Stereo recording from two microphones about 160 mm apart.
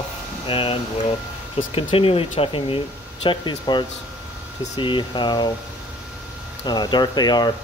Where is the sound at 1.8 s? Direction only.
35° left (ahead or behind).